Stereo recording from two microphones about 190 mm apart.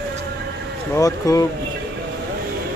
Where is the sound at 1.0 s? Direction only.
15° left (ahead or behind).